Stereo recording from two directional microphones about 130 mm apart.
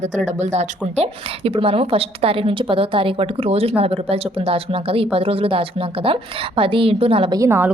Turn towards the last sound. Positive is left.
turn(degrees=-20)  # may be behind; listen again after turning